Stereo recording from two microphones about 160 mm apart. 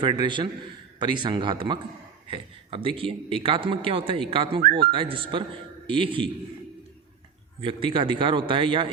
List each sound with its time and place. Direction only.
0.0 s a man's voice: 30° right (ahead or behind)
7.6 s a man's voice: 30° right (ahead or behind)